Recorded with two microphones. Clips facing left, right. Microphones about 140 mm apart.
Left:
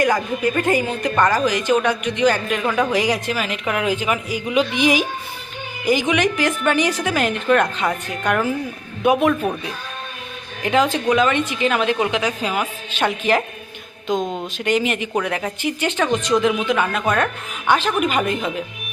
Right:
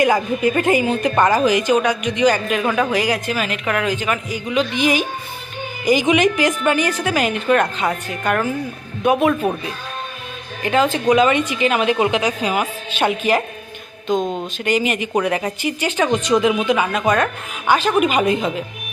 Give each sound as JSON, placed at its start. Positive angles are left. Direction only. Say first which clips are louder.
{"t": 0.0, "sound": "a woman's voice", "louder": "right 2 dB", "side_deg": -20}
{"t": 5.8, "sound": "speech", "louder": "right 3 dB", "side_deg": -15}
{"t": 6.7, "sound": "a woman's voice", "louder": "right 1 dB", "side_deg": -5}
{"t": 10.6, "sound": "a man's voice", "louder": "right 1 dB", "side_deg": 0}
{"t": 11.3, "sound": "a woman's voice", "louder": "right 2 dB", "side_deg": -10}